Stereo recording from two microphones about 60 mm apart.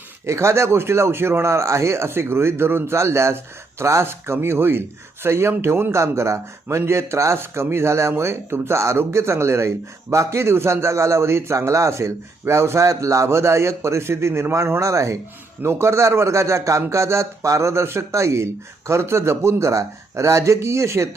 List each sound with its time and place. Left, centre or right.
0.3 s speech: right
13.2 s speech: right